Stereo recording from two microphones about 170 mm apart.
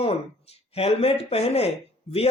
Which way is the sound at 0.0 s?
35° left (ahead or behind).